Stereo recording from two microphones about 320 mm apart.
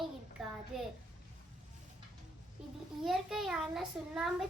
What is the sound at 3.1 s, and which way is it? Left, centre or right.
A child's voice, centre.